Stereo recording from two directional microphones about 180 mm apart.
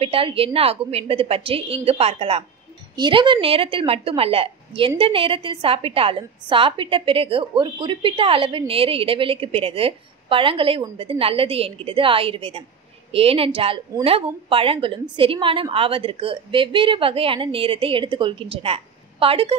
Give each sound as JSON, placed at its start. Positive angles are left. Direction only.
{"t": 0.0, "sound": "a woman's voice", "side_deg": -30}